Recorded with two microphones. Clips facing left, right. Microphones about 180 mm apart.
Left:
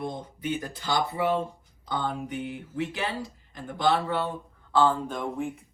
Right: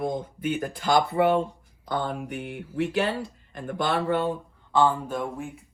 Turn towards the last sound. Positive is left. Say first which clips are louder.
# left 1 dB
turn(degrees=0)  # may be behind; listen again after turning